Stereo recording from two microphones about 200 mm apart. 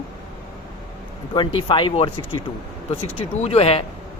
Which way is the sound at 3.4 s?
30° left (ahead or behind).